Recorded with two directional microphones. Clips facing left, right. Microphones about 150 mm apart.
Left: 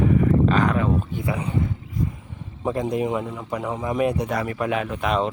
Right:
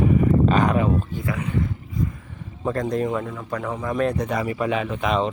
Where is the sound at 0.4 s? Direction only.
20° right (ahead or behind).